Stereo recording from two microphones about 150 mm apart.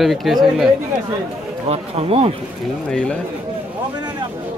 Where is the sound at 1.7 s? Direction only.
40° right (ahead or behind).